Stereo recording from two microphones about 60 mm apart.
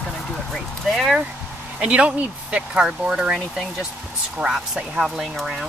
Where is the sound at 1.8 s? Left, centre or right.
Centre.